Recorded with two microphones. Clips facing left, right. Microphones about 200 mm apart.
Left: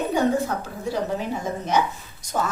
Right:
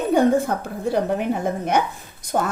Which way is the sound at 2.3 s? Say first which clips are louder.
Right 3 dB; 45° right (ahead or behind).